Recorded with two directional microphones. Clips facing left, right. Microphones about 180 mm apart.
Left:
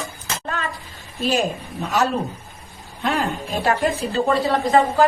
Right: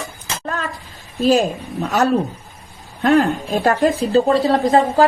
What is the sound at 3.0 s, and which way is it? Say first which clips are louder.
A woman's voice: right 8 dB; 55° right (ahead or behind).